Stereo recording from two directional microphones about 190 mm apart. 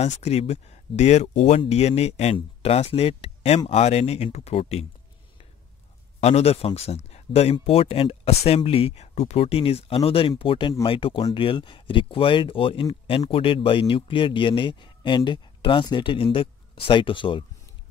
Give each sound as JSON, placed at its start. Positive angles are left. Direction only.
{"t": 0.0, "sound": "speech", "side_deg": 35}
{"t": 6.2, "sound": "speech", "side_deg": 35}